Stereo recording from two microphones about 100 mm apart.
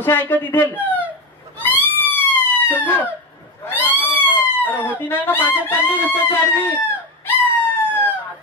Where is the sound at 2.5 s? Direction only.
20° left (ahead or behind).